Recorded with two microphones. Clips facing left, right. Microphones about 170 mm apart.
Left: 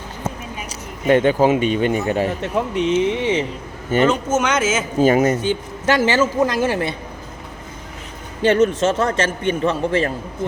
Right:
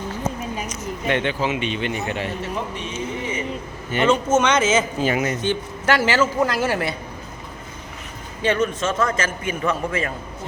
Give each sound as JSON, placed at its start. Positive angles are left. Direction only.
{"t": 0.7, "sound": "speech", "side_deg": 40}
{"t": 2.4, "sound": "speech", "side_deg": 85}
{"t": 4.0, "sound": "speech", "side_deg": 0}
{"t": 4.9, "sound": "speech", "side_deg": 45}
{"t": 5.4, "sound": "a man's voice", "side_deg": 15}
{"t": 8.4, "sound": "a man's voice", "side_deg": 40}